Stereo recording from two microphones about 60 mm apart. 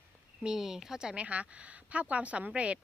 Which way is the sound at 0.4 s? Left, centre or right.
Centre.